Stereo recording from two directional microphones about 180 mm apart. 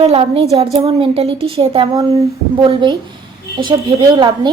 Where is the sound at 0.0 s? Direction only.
35° right (ahead or behind).